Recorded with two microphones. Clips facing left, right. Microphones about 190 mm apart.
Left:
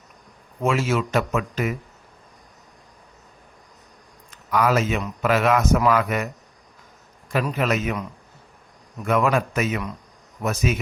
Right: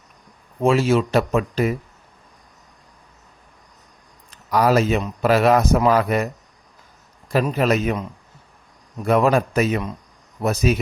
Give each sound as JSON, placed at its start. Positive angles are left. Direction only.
{"t": 0.6, "sound": "a man's voice", "side_deg": -30}
{"t": 4.3, "sound": "a man's voice", "side_deg": -35}
{"t": 7.5, "sound": "a man's voice", "side_deg": -35}
{"t": 9.0, "sound": "a man's voice", "side_deg": -35}